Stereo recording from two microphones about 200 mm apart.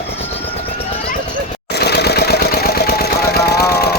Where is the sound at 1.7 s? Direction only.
55° left (ahead or behind).